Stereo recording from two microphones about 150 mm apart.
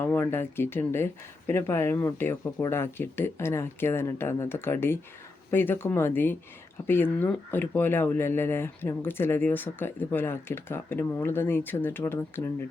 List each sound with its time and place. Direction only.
0.0 s speech: 15° left (ahead or behind)